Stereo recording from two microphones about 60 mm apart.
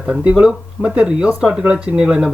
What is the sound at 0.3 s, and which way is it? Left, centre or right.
Speech, centre.